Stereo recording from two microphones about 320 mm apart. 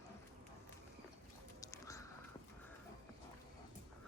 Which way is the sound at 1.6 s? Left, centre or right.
Centre.